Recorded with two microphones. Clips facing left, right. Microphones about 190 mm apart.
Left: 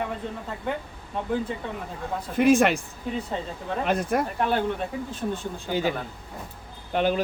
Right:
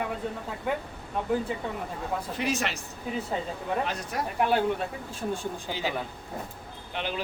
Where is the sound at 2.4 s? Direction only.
55° left (ahead or behind).